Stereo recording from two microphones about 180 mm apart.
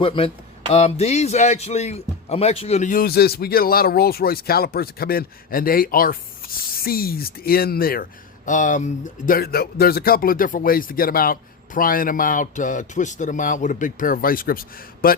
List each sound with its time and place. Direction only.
0.0 s a man's voice: 30° left (ahead or behind); by 15.2 s 55° left (ahead or behind)